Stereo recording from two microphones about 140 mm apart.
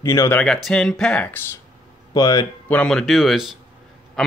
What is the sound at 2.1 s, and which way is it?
Speech, 25° left (ahead or behind).